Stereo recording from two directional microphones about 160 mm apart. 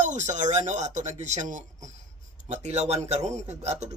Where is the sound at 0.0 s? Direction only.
50° right (ahead or behind).